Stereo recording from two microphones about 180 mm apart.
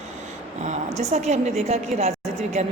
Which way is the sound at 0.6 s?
40° right (ahead or behind).